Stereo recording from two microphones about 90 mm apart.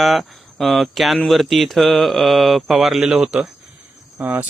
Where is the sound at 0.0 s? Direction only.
Centre (ahead or behind).